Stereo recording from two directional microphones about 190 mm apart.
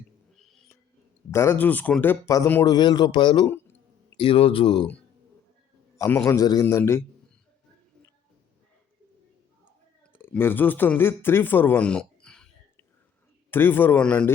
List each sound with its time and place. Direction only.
1.3 s a man's voice: 15° left (ahead or behind)
6.0 s a man's voice: 15° left (ahead or behind)
10.1 s speech: 10° left (ahead or behind)
13.5 s a man's voice: 10° left (ahead or behind)